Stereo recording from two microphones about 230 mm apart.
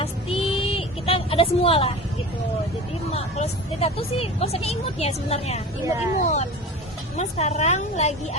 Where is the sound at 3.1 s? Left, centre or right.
Left.